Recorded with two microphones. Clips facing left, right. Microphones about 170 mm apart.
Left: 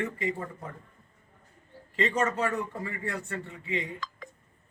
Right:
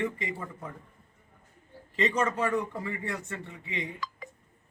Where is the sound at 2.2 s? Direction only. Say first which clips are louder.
Right 1 dB; 20° right (ahead or behind).